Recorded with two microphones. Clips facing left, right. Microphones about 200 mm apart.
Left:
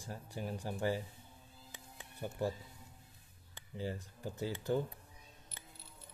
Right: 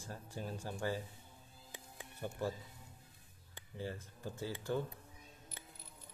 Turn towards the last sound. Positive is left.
turn(degrees=15)  # may be behind; listen again after turning